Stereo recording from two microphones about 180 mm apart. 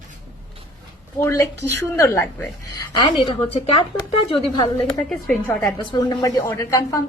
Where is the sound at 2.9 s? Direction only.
25° left (ahead or behind).